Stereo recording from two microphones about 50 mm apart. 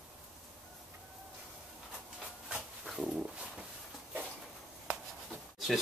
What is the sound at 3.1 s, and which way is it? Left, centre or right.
Dog, centre.